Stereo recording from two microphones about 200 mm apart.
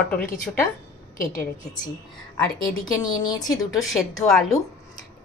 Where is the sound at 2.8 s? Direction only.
20° left (ahead or behind).